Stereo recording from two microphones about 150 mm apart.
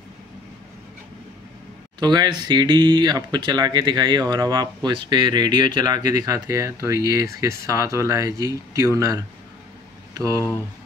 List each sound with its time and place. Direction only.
2.0 s speech: 30° right (ahead or behind)